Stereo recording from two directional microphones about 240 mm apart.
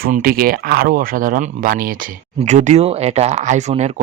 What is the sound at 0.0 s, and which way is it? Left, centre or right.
Speech, right.